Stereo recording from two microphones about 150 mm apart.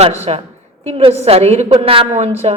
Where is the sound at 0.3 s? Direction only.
40° right (ahead or behind).